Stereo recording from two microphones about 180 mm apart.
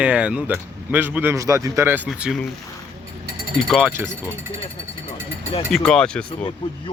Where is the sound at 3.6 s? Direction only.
Centre (ahead or behind).